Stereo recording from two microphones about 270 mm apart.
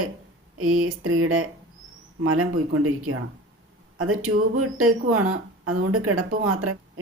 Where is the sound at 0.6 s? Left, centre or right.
Right.